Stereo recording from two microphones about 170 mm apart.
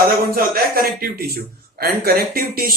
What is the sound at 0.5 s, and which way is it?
Speech, 60° right (ahead or behind).